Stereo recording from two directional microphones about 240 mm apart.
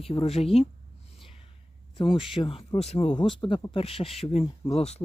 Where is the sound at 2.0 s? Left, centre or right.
Left.